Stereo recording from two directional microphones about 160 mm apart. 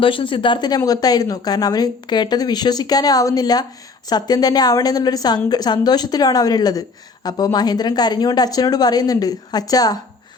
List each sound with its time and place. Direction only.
0.0 s a woman's voice: 35° left (ahead or behind)